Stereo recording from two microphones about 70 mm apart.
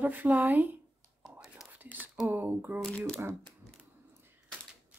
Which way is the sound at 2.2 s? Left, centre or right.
Right.